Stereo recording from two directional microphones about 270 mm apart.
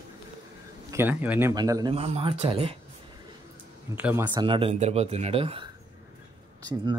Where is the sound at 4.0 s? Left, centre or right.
Centre.